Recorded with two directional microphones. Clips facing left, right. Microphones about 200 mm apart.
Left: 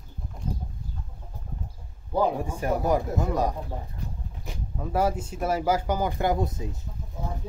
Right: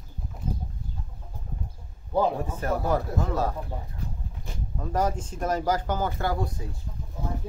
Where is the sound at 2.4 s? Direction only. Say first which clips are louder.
Left 2 dB; 10° left (ahead or behind).